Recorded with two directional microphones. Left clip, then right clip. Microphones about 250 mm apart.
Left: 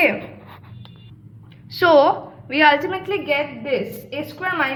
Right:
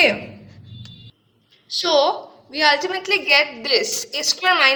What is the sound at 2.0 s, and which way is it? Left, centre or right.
A woman's voice, centre.